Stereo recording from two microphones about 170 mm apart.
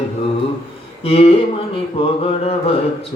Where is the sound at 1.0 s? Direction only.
35° left (ahead or behind).